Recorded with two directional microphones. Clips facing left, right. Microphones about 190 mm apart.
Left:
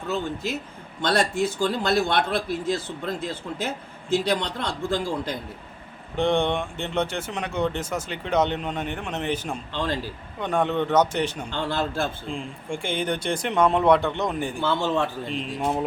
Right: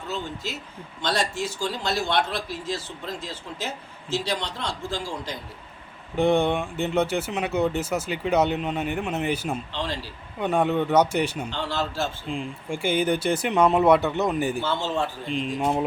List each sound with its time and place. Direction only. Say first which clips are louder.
1.0 s a man's voice: left 4 dB; 55° left (ahead or behind)
6.1 s speech: right 2 dB; 5° right (ahead or behind)
9.7 s a man's voice: left 3 dB; 50° left (ahead or behind)
10.4 s speech: right 1 dB; 10° right (ahead or behind)
11.5 s a man's voice: left 2 dB; 55° left (ahead or behind)
12.3 s speech: right 1 dB; 5° right (ahead or behind)
14.6 s a man's voice: left 2 dB; 60° left (ahead or behind)
15.3 s speech: right 2 dB; centre (ahead or behind)